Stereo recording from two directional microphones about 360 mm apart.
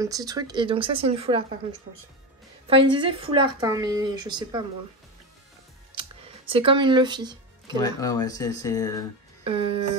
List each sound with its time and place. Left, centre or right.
0.0 s a woman's voice: centre
2.7 s a woman's voice: centre
6.5 s speech: centre
7.8 s speech: centre
9.4 s speech: centre